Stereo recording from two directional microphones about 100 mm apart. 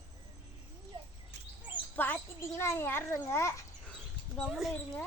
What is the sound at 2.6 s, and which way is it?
Speech, 25° left (ahead or behind).